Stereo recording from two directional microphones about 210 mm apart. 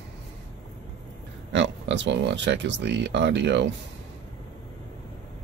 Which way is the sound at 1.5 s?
55° right (ahead or behind).